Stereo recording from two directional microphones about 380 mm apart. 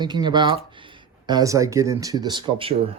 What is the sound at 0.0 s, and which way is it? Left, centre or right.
Speech, centre.